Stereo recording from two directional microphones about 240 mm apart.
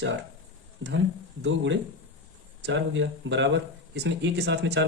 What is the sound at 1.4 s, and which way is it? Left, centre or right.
Speech, right.